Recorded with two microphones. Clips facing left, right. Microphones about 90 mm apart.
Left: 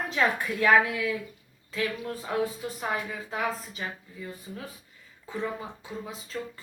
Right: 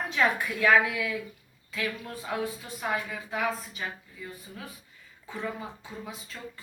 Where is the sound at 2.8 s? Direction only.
30° left (ahead or behind).